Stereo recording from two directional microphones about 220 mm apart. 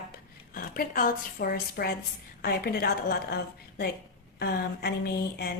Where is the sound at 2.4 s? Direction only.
45° left (ahead or behind).